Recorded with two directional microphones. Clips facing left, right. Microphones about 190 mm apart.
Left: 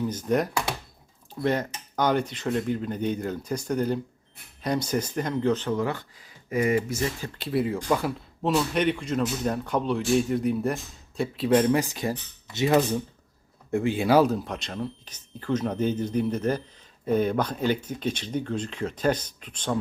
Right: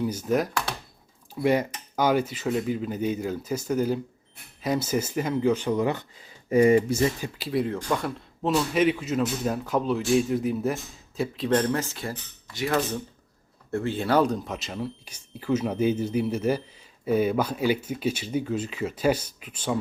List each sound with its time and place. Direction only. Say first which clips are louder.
0.0 s a man's voice: even; 10° right (ahead or behind)
6.5 s speech: right 6 dB; 30° right (ahead or behind)
7.3 s a man's voice: left 1 dB; centre (ahead or behind)